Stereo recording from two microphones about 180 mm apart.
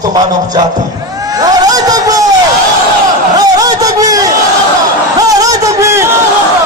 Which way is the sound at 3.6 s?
20° right (ahead or behind).